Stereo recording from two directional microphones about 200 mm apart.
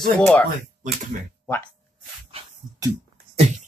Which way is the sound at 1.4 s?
10° left (ahead or behind).